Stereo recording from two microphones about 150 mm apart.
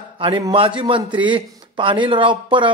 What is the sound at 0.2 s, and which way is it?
A man's voice, 35° right (ahead or behind).